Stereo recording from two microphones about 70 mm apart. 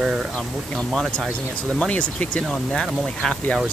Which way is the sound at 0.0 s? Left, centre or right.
Centre.